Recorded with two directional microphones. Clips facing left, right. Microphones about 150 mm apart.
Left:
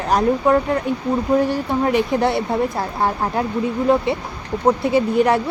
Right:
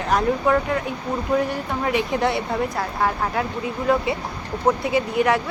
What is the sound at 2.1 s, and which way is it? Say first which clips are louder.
Speech: left 3 dB; 35° left (ahead or behind).